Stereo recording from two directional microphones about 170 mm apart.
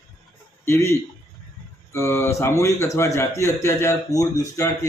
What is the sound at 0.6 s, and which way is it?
Speech, 15° left (ahead or behind).